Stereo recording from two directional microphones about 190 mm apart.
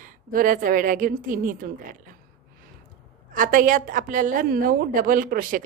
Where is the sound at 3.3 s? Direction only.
45° right (ahead or behind).